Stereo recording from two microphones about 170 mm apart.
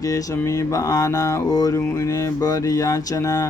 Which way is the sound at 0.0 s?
20° left (ahead or behind).